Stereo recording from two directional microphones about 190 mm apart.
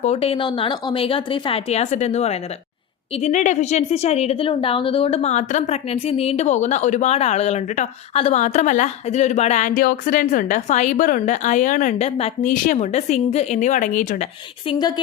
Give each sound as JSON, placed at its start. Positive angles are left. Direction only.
{"t": 0.0, "sound": "a woman's voice", "side_deg": 30}
{"t": 14.7, "sound": "speech", "side_deg": 20}